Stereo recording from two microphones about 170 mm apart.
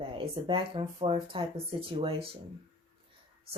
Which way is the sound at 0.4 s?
30° right (ahead or behind).